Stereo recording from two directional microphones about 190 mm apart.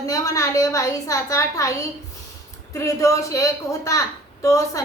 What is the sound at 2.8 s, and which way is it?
A woman's voice, 15° left (ahead or behind).